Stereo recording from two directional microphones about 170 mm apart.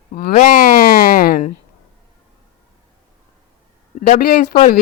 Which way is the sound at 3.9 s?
45° left (ahead or behind).